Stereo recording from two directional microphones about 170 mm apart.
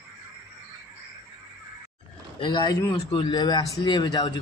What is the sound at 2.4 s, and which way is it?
A man's voice, 25° left (ahead or behind).